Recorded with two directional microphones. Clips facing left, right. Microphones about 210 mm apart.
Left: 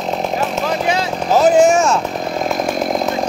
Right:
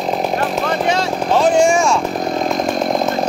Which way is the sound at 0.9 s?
5° left (ahead or behind).